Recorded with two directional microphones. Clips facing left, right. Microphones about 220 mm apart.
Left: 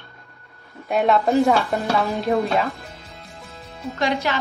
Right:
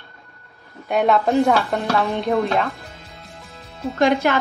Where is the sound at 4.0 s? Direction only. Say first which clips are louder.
Right 6 dB; 55° right (ahead or behind).